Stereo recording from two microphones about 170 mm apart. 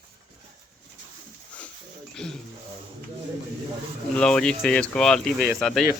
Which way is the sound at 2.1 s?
5° left (ahead or behind).